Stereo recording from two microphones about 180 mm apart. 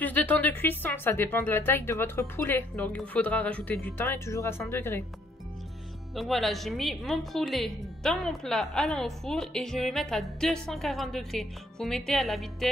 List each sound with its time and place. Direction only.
0.0 s a woman's voice: 10° left (ahead or behind)
6.1 s a woman's voice: centre (ahead or behind)